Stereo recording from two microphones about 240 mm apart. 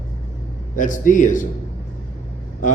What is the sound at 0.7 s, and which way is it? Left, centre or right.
Speech, left.